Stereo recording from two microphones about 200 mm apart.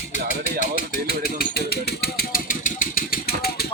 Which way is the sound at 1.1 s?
50° left (ahead or behind).